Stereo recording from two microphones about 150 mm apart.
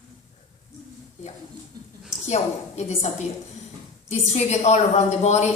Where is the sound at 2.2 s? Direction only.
50° left (ahead or behind).